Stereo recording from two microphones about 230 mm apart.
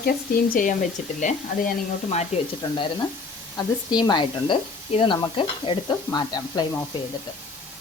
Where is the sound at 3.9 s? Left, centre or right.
Centre.